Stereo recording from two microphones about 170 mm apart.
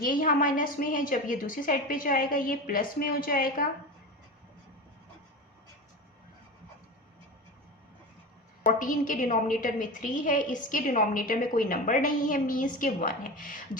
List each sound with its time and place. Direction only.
0.0 s a woman's voice: 55° left (ahead or behind)
8.6 s a woman's voice: 50° left (ahead or behind)